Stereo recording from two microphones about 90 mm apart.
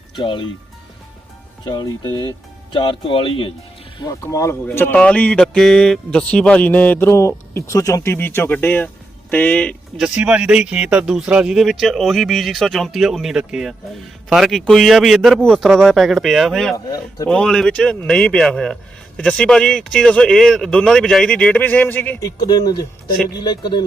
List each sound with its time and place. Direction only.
0.2 s speech: 65° left (ahead or behind)
1.6 s speech: 50° left (ahead or behind)
2.7 s speech: 70° left (ahead or behind)
4.0 s speech: 40° left (ahead or behind)
4.7 s speech: 25° left (ahead or behind)
4.9 s a man's voice: 15° left (ahead or behind)
7.1 s speech: 30° left (ahead or behind)
8.1 s a man's voice: 25° left (ahead or behind)
10.0 s speech: 10° right (ahead or behind)
16.7 s speech: 40° left (ahead or behind)
17.2 s a man's voice: 10° left (ahead or behind)
22.4 s speech: 45° left (ahead or behind)
23.4 s speech: 55° left (ahead or behind)